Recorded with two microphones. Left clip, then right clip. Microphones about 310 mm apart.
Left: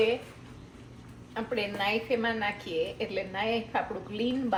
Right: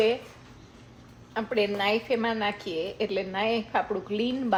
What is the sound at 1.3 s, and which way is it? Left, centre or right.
A woman's voice, right.